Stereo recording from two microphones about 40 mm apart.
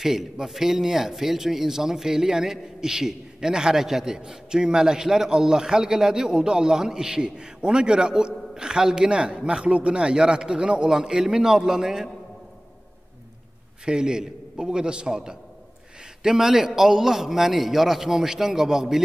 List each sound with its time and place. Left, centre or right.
0.0 s a man's voice: centre
13.8 s a man's voice: centre